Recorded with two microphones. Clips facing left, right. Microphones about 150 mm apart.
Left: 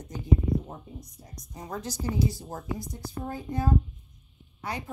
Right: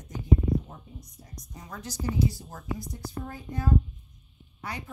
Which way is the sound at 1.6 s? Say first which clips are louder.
Left 6 dB; 35° left (ahead or behind).